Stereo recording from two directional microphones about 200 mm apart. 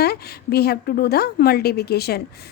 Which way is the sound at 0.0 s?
50° left (ahead or behind).